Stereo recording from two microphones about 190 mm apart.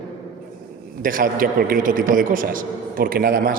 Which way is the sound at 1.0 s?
45° right (ahead or behind).